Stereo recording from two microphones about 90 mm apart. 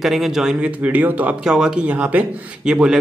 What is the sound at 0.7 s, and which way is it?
Speech, 15° right (ahead or behind).